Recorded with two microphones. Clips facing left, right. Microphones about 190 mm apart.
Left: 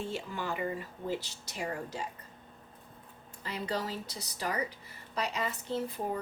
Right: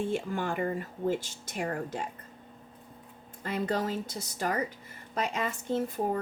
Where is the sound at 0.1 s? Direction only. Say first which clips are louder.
Right 5 dB; 50° right (ahead or behind).